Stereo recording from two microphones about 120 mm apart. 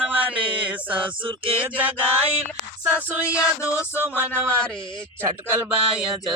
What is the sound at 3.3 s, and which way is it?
Music, 25° left (ahead or behind).